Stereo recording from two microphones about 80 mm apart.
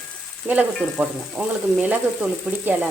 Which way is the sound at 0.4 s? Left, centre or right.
Centre.